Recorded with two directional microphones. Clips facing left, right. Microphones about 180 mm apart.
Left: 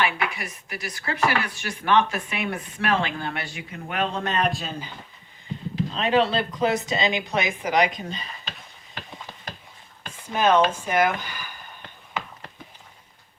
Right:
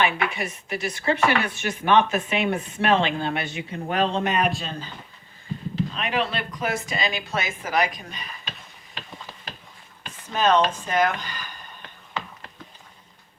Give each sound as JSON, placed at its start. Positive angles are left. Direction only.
{"t": 0.0, "sound": "speech", "side_deg": -25}
{"t": 4.2, "sound": "a man's voice", "side_deg": -10}
{"t": 5.9, "sound": "speech", "side_deg": 30}
{"t": 10.1, "sound": "speech", "side_deg": 10}